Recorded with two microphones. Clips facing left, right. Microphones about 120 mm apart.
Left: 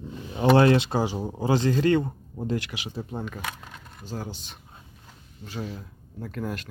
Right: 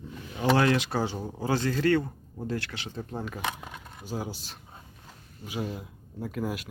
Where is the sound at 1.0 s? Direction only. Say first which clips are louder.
Left 4 dB; 15° left (ahead or behind).